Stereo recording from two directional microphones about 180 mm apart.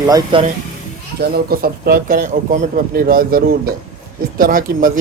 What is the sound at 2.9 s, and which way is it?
A man's voice, 55° right (ahead or behind).